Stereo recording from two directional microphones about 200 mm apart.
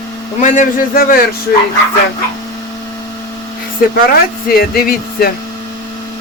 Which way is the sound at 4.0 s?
50° left (ahead or behind).